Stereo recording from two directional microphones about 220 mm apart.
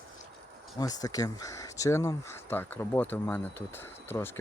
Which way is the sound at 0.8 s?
15° left (ahead or behind).